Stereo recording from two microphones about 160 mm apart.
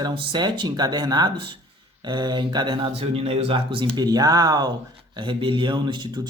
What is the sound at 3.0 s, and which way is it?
Speech, 40° right (ahead or behind).